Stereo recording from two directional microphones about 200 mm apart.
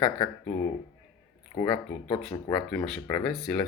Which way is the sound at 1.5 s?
20° left (ahead or behind).